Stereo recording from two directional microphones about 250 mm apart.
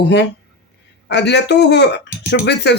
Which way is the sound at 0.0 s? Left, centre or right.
Left.